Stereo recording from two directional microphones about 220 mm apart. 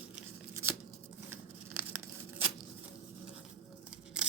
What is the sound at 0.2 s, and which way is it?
Tearing, 10° right (ahead or behind).